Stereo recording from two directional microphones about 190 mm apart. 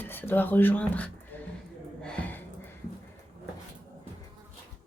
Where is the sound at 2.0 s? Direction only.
5° left (ahead or behind).